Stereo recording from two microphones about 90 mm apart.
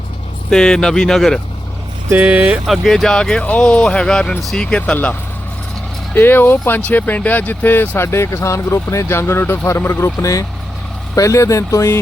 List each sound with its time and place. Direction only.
0.5 s speech: 5° left (ahead or behind)
2.1 s speech: 20° right (ahead or behind)
2.6 s speech: centre (ahead or behind)
6.1 s speech: 20° left (ahead or behind)